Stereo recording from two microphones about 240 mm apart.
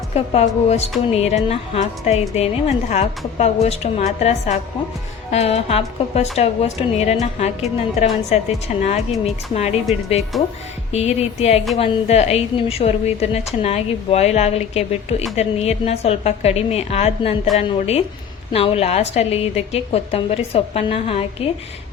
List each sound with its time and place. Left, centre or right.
0.1 s a woman's voice: left
10.3 s speech: centre
10.9 s a woman's voice: left
18.5 s a woman's voice: left